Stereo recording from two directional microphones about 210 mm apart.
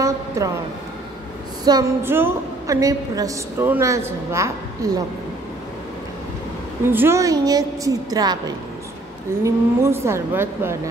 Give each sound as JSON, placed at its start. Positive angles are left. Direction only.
{"t": 0.4, "sound": "a woman's voice", "side_deg": -15}
{"t": 1.6, "sound": "a woman's voice", "side_deg": -20}
{"t": 6.9, "sound": "a woman's voice", "side_deg": -10}